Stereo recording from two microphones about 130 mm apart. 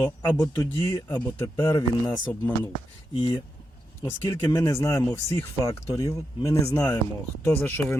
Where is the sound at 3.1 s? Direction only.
45° left (ahead or behind).